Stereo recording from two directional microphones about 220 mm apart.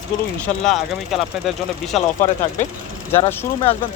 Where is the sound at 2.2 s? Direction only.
35° left (ahead or behind).